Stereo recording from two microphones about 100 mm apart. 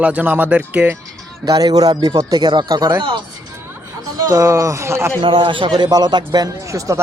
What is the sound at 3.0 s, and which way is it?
Speech, 55° right (ahead or behind).